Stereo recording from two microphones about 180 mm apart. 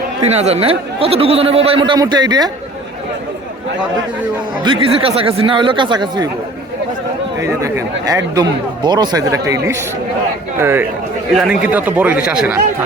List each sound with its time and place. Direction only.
0.2 s speech: 35° right (ahead or behind)
4.6 s speech: 30° right (ahead or behind)
7.3 s speech: 15° right (ahead or behind)
10.6 s speech: 15° right (ahead or behind)